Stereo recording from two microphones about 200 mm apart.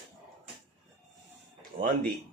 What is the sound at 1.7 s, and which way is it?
Speech, 35° right (ahead or behind).